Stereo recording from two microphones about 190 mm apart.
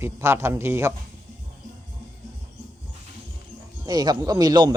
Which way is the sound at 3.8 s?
20° right (ahead or behind).